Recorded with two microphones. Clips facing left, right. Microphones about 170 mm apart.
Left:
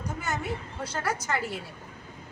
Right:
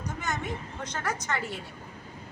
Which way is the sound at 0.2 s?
10° left (ahead or behind).